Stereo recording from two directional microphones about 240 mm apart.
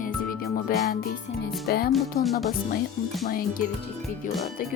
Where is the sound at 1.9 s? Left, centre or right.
Centre.